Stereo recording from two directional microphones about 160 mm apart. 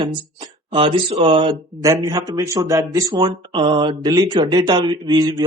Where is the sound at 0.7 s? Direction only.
30° right (ahead or behind).